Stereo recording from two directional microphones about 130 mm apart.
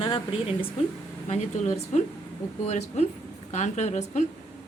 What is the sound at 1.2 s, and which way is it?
A woman's voice, 60° left (ahead or behind).